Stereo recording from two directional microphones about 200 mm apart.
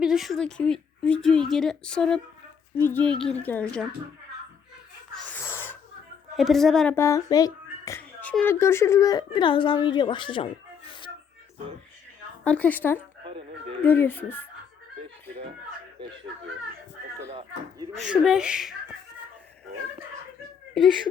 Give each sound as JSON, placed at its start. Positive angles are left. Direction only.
{"t": 0.0, "sound": "a woman's voice", "side_deg": 0}
{"t": 5.1, "sound": "sneeze", "side_deg": 10}
{"t": 6.3, "sound": "a woman's voice", "side_deg": 0}
{"t": 6.9, "sound": "speech", "side_deg": 15}
{"t": 12.5, "sound": "a woman's voice", "side_deg": 10}
{"t": 13.2, "sound": "a sound", "side_deg": -25}
{"t": 13.8, "sound": "a woman's voice", "side_deg": 10}
{"t": 18.0, "sound": "a woman's voice", "side_deg": -5}